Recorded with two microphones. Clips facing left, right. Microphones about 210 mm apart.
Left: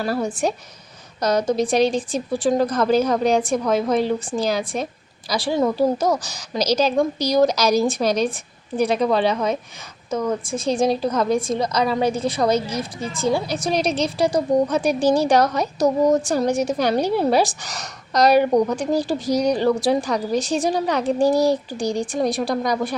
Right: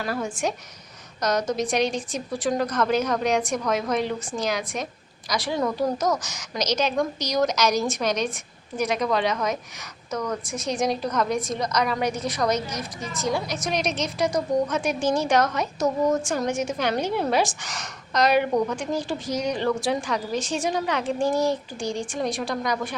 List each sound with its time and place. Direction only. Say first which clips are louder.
0.0 s a woman's voice: left 5 dB; 35° left (ahead or behind)